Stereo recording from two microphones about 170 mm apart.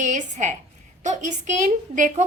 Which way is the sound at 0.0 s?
45° right (ahead or behind).